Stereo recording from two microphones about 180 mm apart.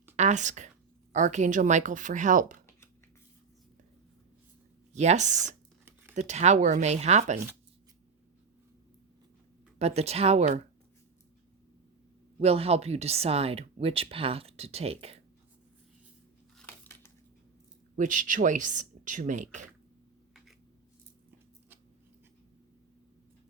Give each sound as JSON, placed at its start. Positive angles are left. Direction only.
{"t": 0.2, "sound": "a woman's voice", "side_deg": -40}
{"t": 4.9, "sound": "speech", "side_deg": -40}
{"t": 5.8, "sound": "a sound", "side_deg": -10}
{"t": 6.1, "sound": "speech", "side_deg": -40}
{"t": 9.7, "sound": "speech", "side_deg": -35}
{"t": 12.4, "sound": "speech", "side_deg": -35}
{"t": 16.6, "sound": "a sound", "side_deg": 10}
{"t": 17.9, "sound": "speech", "side_deg": -45}